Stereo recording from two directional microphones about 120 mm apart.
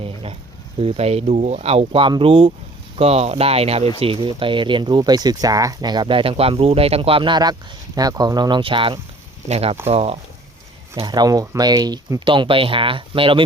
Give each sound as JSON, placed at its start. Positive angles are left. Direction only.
{"t": 0.0, "sound": "speech", "side_deg": -50}
{"t": 3.0, "sound": "speech", "side_deg": -60}
{"t": 4.0, "sound": "speech", "side_deg": -45}
{"t": 9.5, "sound": "speech", "side_deg": -55}
{"t": 11.0, "sound": "speech", "side_deg": -35}